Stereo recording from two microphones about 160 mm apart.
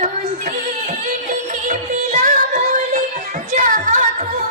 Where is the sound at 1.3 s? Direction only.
55° right (ahead or behind).